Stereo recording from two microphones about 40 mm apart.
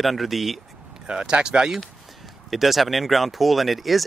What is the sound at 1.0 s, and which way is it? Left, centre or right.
Speech, right.